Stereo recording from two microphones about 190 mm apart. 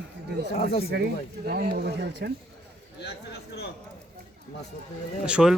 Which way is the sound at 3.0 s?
60° left (ahead or behind).